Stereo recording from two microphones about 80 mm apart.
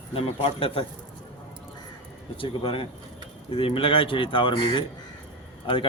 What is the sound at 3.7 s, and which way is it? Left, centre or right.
Speech, left.